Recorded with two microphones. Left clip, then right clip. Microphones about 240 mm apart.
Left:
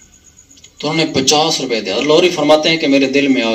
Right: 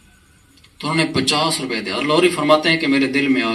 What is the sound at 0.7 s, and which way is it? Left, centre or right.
A man's voice, right.